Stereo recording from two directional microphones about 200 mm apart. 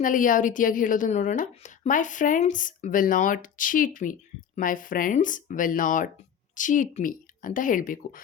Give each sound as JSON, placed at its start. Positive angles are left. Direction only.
{"t": 0.0, "sound": "a woman's voice", "side_deg": 40}